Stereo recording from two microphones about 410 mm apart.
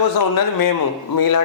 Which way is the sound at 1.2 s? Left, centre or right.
Left.